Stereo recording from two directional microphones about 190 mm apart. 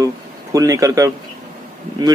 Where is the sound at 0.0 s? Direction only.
15° right (ahead or behind).